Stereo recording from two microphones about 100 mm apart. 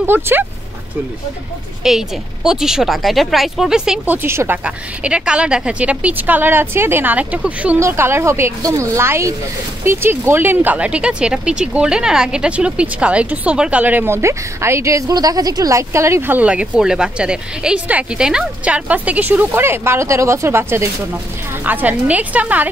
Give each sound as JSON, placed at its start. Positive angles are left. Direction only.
{"t": 0.0, "sound": "speech", "side_deg": -20}
{"t": 1.8, "sound": "speech", "side_deg": -5}
{"t": 4.0, "sound": "speech", "side_deg": -20}
{"t": 4.6, "sound": "speech", "side_deg": -10}
{"t": 7.8, "sound": "speech", "side_deg": -25}